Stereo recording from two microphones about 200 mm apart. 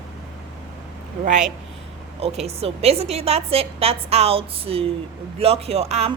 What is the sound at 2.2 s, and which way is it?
A woman's voice, 30° right (ahead or behind).